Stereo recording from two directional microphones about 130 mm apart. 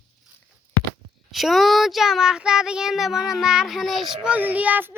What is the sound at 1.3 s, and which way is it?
Speech, centre (ahead or behind).